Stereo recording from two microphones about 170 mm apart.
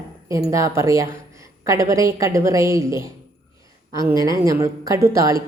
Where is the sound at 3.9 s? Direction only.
25° left (ahead or behind).